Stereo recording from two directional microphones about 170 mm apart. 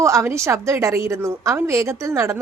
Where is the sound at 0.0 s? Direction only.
15° right (ahead or behind).